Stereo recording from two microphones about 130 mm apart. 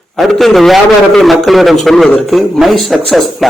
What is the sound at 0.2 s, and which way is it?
A man's voice, centre (ahead or behind).